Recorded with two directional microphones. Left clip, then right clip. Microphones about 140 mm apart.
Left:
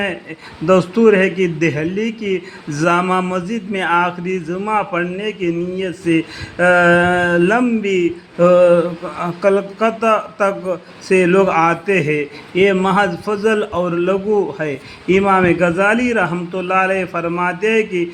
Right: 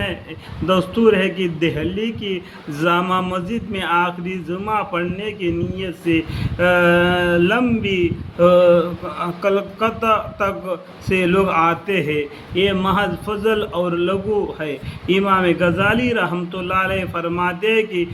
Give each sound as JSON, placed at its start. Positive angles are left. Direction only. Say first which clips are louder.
{"t": 0.7, "sound": "a man's voice", "louder": "left 4 dB", "side_deg": 50}
{"t": 7.4, "sound": "a man's voice", "louder": "left 3 dB", "side_deg": 40}
{"t": 8.4, "sound": "mantra", "louder": "left 2 dB", "side_deg": 60}
{"t": 9.4, "sound": "a man's voice", "louder": "left 4 dB", "side_deg": 45}
{"t": 17.6, "sound": "a man's voice", "louder": "left 2 dB", "side_deg": 55}